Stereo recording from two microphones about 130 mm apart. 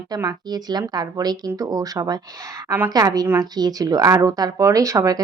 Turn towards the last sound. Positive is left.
turn(degrees=-25)  # may be behind; listen again after turning